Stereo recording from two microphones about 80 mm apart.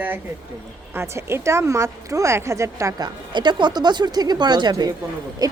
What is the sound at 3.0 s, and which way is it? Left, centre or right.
Speech, right.